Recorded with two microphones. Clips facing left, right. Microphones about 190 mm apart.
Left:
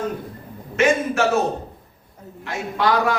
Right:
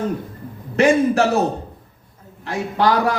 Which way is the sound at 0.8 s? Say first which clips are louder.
Right 4 dB; 35° right (ahead or behind).